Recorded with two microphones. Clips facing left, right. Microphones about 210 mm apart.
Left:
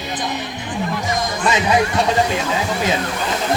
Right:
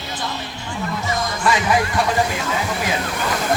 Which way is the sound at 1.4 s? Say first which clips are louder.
Left 1 dB; 20° left (ahead or behind).